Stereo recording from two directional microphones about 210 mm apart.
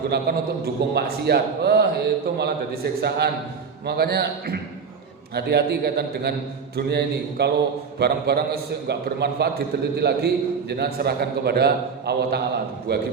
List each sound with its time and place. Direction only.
0.1 s a man's voice: 50° right (ahead or behind)